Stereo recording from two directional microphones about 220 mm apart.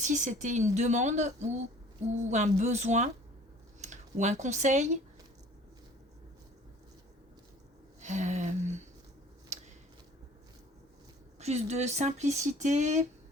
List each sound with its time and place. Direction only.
0.0 s speech: 35° right (ahead or behind)
8.0 s speech: 35° right (ahead or behind)
11.3 s speech: 30° right (ahead or behind)